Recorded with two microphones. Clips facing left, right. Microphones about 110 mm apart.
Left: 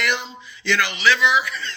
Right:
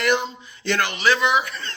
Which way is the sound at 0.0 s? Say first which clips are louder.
Right 4 dB; 45° right (ahead or behind).